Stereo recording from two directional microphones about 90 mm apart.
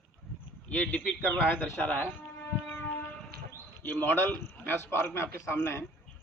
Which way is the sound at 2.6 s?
20° left (ahead or behind).